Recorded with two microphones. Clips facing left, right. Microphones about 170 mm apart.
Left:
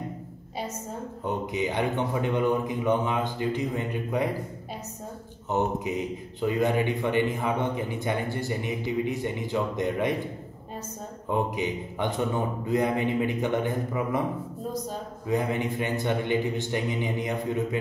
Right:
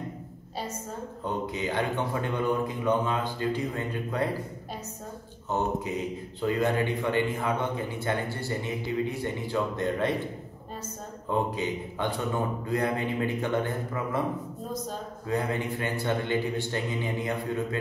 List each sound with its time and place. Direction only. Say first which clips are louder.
1.2 s a man's voice: left 2 dB; 15° left (ahead or behind)
5.5 s a man's voice: left 2 dB; 15° left (ahead or behind)
11.2 s a man's voice: left 1 dB; 15° left (ahead or behind)
15.2 s a man's voice: left 2 dB; 15° left (ahead or behind)